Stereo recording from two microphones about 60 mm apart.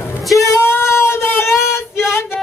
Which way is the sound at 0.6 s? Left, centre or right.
Left.